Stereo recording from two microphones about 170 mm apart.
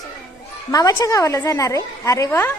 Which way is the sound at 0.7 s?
20° left (ahead or behind).